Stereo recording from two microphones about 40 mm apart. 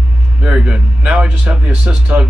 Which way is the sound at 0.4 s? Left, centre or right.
Right.